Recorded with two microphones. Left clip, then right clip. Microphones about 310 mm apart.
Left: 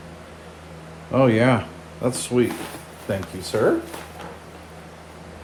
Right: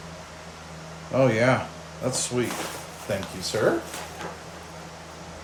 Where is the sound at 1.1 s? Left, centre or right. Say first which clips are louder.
Left 3 dB; left.